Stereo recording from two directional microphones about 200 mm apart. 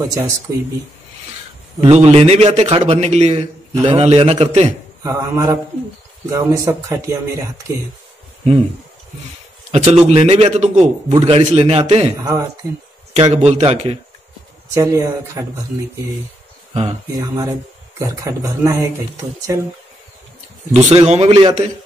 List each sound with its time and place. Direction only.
0.1 s speech: 15° right (ahead or behind)
1.8 s a man's voice: 35° right (ahead or behind)
5.0 s speech: 15° right (ahead or behind)
9.7 s a man's voice: 30° right (ahead or behind)
12.2 s speech: 15° right (ahead or behind)
13.1 s a man's voice: 30° right (ahead or behind)
14.7 s speech: 15° right (ahead or behind)
16.7 s a man's voice: 30° right (ahead or behind)
17.2 s speech: 15° right (ahead or behind)
20.7 s a man's voice: 30° right (ahead or behind)